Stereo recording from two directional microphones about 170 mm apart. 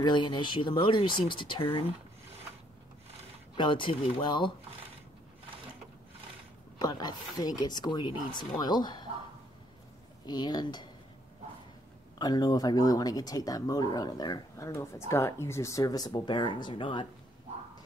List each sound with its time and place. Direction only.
0.0 s speech: 25° left (ahead or behind)
3.5 s speech: 30° left (ahead or behind)
6.8 s speech: 25° left (ahead or behind)
10.2 s speech: 25° left (ahead or behind)
12.2 s speech: 25° left (ahead or behind)